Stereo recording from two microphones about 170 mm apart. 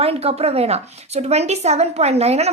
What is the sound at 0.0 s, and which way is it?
A woman's voice, 35° right (ahead or behind).